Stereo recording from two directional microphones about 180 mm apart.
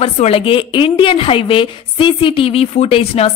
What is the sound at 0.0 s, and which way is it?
Speech, 35° left (ahead or behind).